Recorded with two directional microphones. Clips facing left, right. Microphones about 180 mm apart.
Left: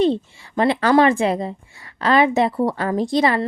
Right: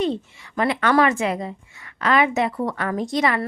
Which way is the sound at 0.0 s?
30° left (ahead or behind).